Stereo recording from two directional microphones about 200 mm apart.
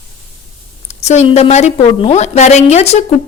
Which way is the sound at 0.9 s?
35° left (ahead or behind).